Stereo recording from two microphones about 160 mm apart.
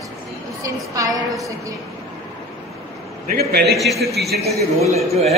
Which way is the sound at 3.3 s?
85° right.